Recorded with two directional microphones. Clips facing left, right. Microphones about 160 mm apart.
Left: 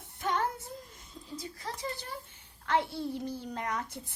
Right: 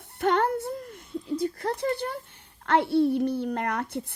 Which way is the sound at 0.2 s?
65° right (ahead or behind).